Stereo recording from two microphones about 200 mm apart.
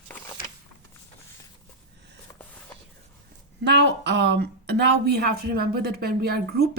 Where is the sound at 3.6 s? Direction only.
60° right (ahead or behind).